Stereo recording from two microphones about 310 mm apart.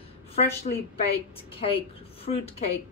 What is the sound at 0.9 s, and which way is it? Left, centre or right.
A woman's voice, centre.